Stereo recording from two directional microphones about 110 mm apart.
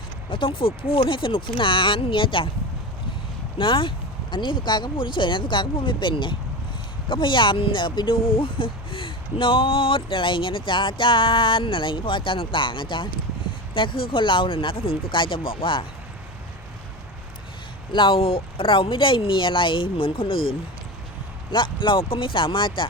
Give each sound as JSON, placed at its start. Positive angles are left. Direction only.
{"t": 0.3, "sound": "speech", "side_deg": 55}
{"t": 3.6, "sound": "speech", "side_deg": 50}
{"t": 17.9, "sound": "speech", "side_deg": 50}